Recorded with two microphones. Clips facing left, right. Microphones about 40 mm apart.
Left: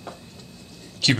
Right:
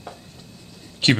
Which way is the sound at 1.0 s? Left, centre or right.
Right.